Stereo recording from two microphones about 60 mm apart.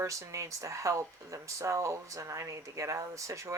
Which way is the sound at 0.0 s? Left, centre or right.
Right.